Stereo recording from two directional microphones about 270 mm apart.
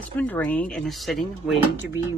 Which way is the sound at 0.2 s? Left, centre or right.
Centre.